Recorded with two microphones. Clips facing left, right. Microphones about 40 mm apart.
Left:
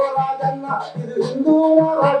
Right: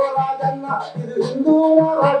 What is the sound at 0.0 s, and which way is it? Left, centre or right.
Music, centre.